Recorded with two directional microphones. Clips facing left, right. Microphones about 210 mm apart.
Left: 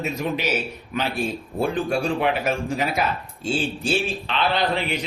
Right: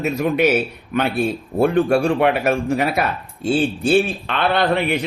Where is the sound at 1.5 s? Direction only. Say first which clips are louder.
Right 8 dB; 65° right (ahead or behind).